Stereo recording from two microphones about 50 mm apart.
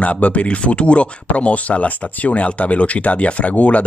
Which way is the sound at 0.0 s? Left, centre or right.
Left.